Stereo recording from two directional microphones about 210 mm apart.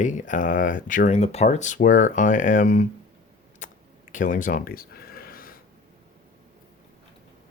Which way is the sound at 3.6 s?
35° left (ahead or behind).